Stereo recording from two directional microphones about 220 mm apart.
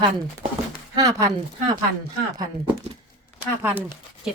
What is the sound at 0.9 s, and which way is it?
Speech, 15° right (ahead or behind).